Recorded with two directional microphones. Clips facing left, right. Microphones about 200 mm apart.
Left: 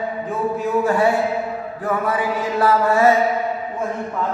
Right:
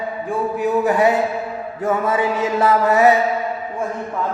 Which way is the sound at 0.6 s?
20° right (ahead or behind).